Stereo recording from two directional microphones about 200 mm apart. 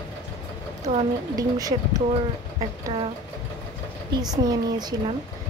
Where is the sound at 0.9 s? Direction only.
35° right (ahead or behind).